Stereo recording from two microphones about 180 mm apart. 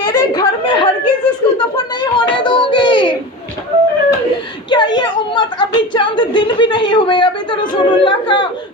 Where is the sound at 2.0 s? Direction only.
25° left (ahead or behind).